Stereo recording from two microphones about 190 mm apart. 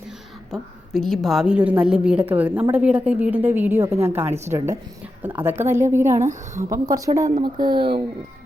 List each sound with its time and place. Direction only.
0.5 s a woman's voice: centre (ahead or behind)
6.2 s a woman's voice: 40° right (ahead or behind)
6.7 s a woman's voice: 20° right (ahead or behind)